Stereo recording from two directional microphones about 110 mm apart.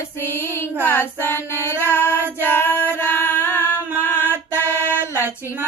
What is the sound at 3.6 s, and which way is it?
Music, 20° right (ahead or behind).